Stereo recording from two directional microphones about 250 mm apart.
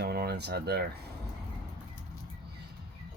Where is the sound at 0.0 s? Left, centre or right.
Right.